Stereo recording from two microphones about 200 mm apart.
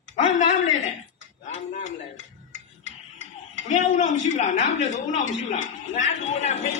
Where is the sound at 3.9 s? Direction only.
35° left (ahead or behind).